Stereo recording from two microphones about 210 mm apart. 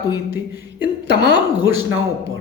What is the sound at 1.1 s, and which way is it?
Speech, 55° right (ahead or behind).